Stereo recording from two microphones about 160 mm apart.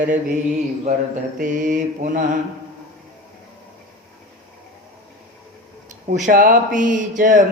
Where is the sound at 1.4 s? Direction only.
50° right (ahead or behind).